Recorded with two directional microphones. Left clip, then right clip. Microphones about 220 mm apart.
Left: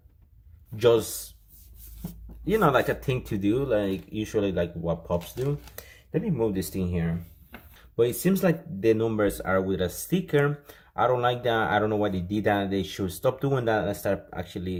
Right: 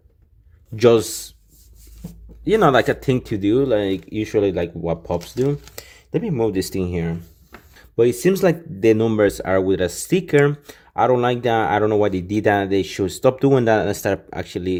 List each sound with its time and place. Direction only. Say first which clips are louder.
0.8 s speech: right 7 dB; 40° right (ahead or behind)
2.4 s speech: right 7 dB; 35° right (ahead or behind)